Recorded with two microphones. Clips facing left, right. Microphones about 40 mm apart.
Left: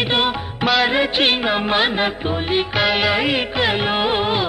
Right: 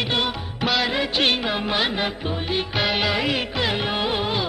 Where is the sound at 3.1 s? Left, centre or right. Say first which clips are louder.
Left 4 dB; left.